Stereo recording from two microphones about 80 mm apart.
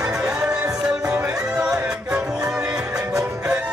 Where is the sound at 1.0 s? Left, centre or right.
Right.